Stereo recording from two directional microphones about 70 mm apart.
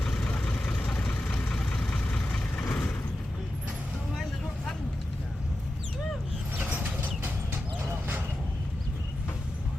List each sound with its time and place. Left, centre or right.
0.0 s vehicle: centre
4.1 s vehicle: centre
6.6 s mechanisms: right
7.2 s a sound: right